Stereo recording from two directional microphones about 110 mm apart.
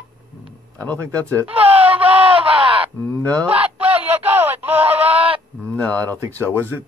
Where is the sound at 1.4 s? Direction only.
15° right (ahead or behind).